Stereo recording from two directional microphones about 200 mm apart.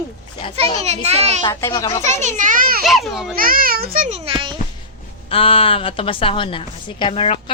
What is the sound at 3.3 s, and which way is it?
Speech, 45° right (ahead or behind).